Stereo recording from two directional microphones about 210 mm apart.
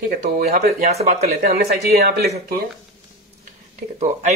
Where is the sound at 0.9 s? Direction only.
30° right (ahead or behind).